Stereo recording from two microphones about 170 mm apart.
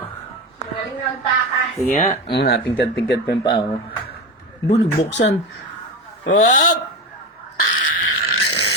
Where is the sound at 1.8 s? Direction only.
45° left (ahead or behind).